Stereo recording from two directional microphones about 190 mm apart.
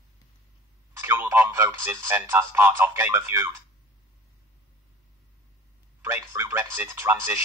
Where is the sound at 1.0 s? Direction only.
10° right (ahead or behind).